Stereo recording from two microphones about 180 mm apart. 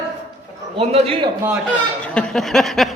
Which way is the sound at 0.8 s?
35° right (ahead or behind).